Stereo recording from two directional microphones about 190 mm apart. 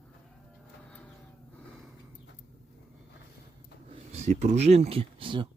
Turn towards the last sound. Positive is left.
turn(degrees=-25)  # may be behind; listen again after turning